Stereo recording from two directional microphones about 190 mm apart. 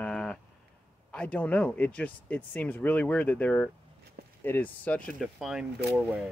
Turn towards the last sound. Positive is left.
turn(degrees=-5)  # may be behind; listen again after turning